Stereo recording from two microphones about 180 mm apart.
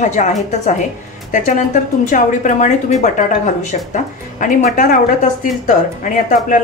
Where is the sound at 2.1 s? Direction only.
45° left (ahead or behind).